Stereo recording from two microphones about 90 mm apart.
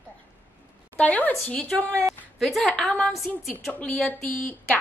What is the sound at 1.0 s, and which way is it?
Speech, 15° left (ahead or behind).